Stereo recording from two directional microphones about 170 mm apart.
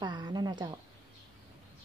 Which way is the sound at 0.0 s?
25° right (ahead or behind).